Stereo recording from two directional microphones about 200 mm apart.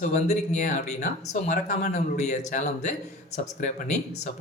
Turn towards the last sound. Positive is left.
turn(degrees=40)  # may be behind; listen again after turning